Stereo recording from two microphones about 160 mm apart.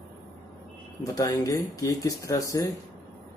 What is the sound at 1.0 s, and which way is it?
Speech, 20° left (ahead or behind).